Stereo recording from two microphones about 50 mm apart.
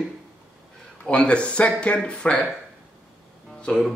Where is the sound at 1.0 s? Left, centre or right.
Left.